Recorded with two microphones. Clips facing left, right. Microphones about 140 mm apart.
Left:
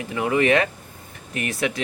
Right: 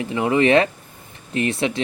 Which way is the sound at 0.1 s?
25° right (ahead or behind).